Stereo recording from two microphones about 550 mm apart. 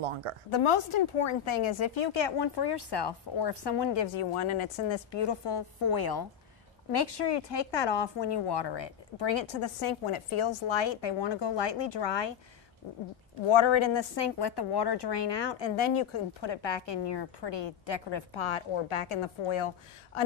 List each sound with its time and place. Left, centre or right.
0.0 s a woman's voice: right
0.5 s a woman's voice: left
13.5 s a woman's voice: left